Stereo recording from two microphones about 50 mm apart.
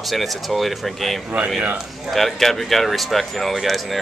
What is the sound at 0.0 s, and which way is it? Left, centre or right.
Speech, centre.